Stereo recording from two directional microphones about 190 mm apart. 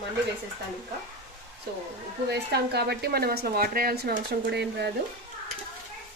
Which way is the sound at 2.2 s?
60° right (ahead or behind).